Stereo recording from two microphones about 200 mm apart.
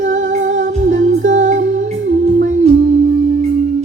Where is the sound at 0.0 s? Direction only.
40° right (ahead or behind).